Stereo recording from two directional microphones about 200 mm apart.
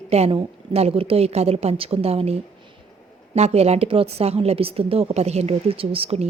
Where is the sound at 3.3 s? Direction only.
30° right (ahead or behind).